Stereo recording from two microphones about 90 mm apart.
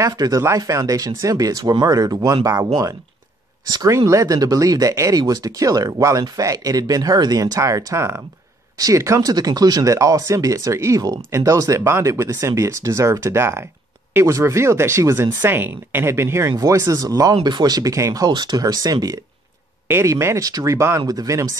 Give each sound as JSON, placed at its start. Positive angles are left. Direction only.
{"t": 0.0, "sound": "speech", "side_deg": -40}
{"t": 19.9, "sound": "speech", "side_deg": -30}